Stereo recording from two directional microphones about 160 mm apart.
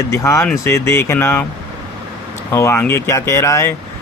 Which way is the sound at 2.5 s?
15° left (ahead or behind).